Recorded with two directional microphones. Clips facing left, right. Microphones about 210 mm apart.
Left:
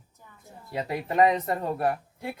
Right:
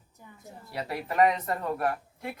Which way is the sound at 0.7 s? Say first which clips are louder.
Left 4 dB; 20° left (ahead or behind).